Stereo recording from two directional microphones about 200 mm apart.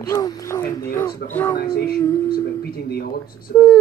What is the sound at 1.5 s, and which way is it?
Speech, 50° left (ahead or behind).